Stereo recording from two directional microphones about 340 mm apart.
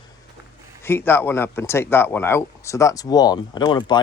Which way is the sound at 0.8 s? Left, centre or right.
Centre.